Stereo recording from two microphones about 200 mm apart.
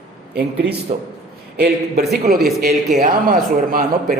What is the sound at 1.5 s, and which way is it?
Speech, 50° right (ahead or behind).